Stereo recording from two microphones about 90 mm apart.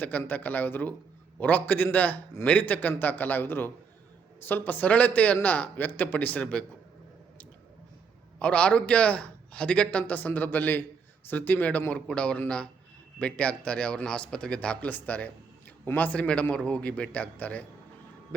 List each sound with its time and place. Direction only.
0.0 s a man's voice: 20° left (ahead or behind)
8.4 s a man's voice: 15° left (ahead or behind)